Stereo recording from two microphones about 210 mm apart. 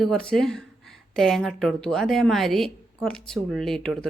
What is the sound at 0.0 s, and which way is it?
A woman's voice, centre (ahead or behind).